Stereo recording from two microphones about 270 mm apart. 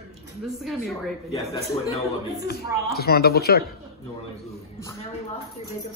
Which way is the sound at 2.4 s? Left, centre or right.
Left.